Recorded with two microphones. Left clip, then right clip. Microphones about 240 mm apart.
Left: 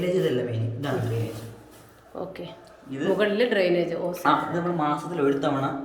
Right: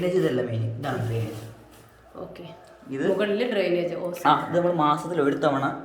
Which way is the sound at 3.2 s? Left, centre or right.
Centre.